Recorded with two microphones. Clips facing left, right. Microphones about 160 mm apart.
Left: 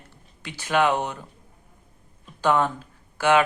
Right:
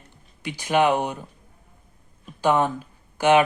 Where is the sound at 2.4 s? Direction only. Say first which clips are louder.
Right 1 dB; 15° right (ahead or behind).